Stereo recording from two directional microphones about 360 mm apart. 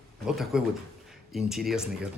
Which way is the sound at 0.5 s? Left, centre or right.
Centre.